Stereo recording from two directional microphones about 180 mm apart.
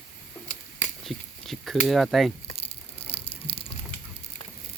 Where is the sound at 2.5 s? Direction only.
30° left (ahead or behind).